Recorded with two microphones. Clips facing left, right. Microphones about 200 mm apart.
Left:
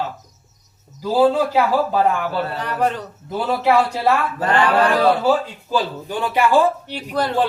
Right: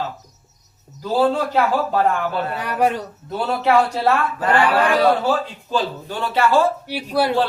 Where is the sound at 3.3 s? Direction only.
5° left (ahead or behind).